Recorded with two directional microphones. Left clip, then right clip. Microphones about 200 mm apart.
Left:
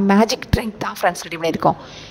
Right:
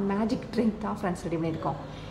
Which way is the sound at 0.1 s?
50° left (ahead or behind).